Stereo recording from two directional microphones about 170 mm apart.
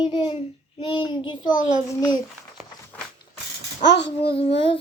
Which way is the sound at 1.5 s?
50° left (ahead or behind).